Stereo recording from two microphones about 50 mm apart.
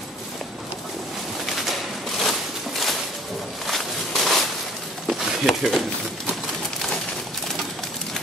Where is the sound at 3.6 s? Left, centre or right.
Centre.